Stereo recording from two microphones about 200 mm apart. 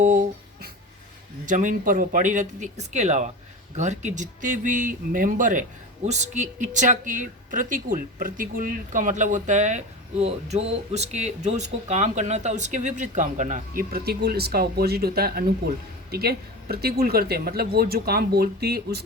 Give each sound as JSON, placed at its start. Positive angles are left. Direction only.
{"t": 0.0, "sound": "speech", "side_deg": -40}